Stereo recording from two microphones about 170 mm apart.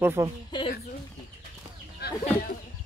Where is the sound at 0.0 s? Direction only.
15° right (ahead or behind).